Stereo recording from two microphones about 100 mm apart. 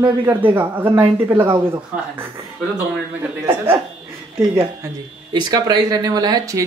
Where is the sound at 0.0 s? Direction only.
20° right (ahead or behind).